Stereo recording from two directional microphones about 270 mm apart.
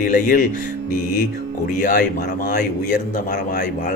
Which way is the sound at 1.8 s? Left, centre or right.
Left.